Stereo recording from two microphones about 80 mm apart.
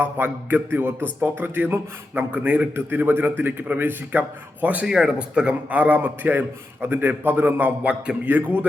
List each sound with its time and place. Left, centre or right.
0.0 s speech: right
4.9 s a man's voice: centre